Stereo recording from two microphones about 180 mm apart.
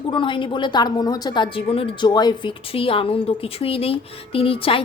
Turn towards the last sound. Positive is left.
turn(degrees=30)  # may be behind; listen again after turning